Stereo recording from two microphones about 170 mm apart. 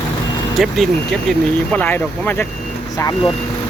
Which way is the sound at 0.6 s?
Centre (ahead or behind).